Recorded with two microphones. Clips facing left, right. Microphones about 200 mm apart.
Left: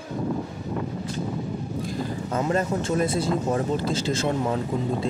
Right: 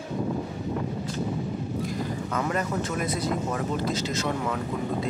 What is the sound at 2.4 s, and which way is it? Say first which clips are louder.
Speech: left 4 dB; 25° left (ahead or behind).